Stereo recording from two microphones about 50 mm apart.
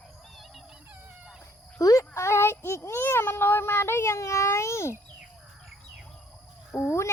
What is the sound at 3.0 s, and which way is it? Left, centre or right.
Speech, left.